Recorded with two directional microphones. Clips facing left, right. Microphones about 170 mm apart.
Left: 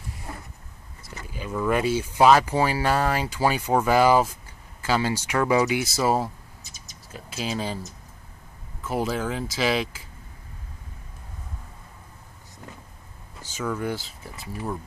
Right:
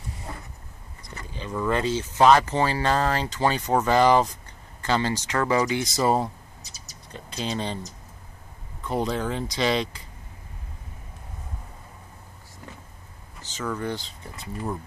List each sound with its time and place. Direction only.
1.0 s speech: 5° left (ahead or behind)
13.4 s speech: 10° left (ahead or behind)